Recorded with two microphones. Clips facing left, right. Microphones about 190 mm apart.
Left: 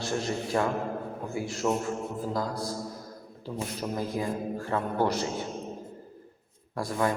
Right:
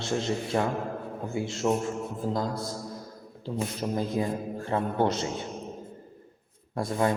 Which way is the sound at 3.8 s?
15° right (ahead or behind).